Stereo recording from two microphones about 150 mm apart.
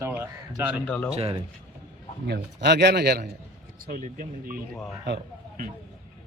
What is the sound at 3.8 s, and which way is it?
Speech, 65° right (ahead or behind).